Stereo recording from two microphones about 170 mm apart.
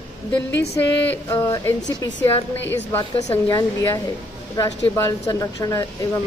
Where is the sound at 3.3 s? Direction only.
20° left (ahead or behind).